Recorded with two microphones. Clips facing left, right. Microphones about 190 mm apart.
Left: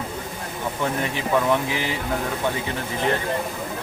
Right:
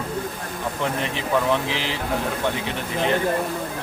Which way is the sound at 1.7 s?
85° right.